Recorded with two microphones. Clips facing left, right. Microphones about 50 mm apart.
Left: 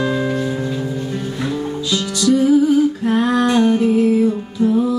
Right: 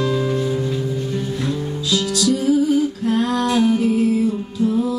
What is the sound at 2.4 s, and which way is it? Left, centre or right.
Humming, left.